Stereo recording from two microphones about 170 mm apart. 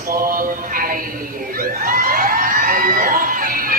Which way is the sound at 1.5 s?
55° right (ahead or behind).